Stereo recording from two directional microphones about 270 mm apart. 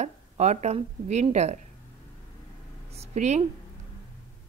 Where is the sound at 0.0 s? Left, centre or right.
Right.